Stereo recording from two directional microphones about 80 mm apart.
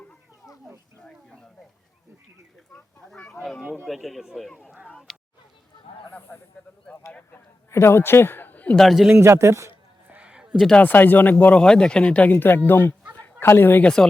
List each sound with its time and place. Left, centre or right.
2.7 s speech: centre
5.1 s a sound: centre
6.1 s speech: left
7.7 s a man's voice: left
8.7 s speech: centre
9.1 s a man's voice: right
10.1 s a sound: centre
10.5 s speech: centre
10.8 s speech: left
11.6 s speech: centre; by 12.9 s left
13.1 s chicken: left
13.8 s speech: centre